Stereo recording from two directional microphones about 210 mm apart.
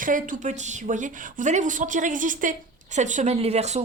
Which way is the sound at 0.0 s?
40° right (ahead or behind).